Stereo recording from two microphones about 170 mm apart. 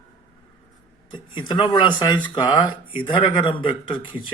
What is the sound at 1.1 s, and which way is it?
Speech, 25° left (ahead or behind).